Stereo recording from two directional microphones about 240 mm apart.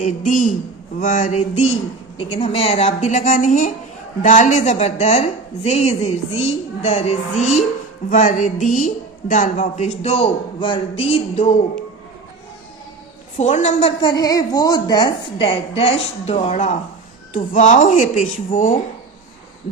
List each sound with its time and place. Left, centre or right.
0.0 s a woman's voice: left
13.3 s a woman's voice: left